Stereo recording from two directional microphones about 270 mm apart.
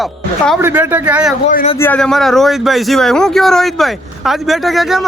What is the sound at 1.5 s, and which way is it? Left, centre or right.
Speech, left.